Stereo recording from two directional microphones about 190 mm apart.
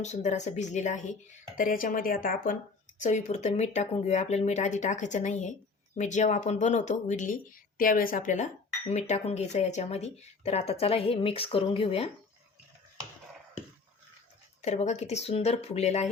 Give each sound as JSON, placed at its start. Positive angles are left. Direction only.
{"t": 0.0, "sound": "speech", "side_deg": 40}
{"t": 14.6, "sound": "speech", "side_deg": 35}